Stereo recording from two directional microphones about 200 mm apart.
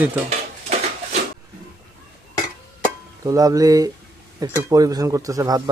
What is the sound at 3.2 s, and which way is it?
Speech, 15° right (ahead or behind).